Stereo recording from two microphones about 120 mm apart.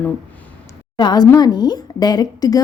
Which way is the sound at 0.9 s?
35° left (ahead or behind).